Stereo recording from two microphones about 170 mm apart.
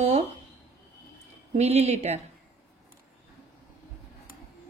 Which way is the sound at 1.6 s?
40° right (ahead or behind).